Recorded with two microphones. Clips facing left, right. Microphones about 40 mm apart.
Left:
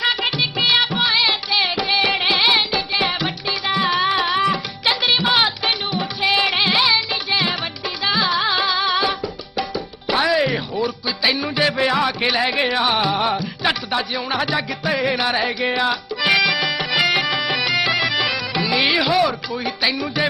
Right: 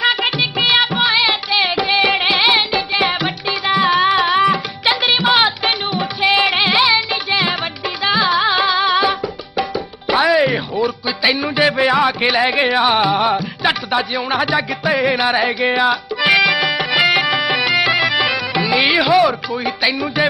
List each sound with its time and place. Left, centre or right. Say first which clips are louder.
0.0 s music: right 4 dB; centre
17.1 s bagpipes: right 4 dB; centre
18.7 s music: right 4 dB; centre